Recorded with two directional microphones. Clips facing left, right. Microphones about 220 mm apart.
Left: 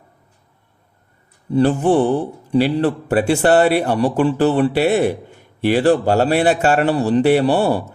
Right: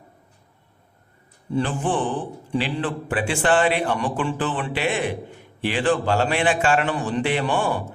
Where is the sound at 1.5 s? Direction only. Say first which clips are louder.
Left 9 dB; 40° left (ahead or behind).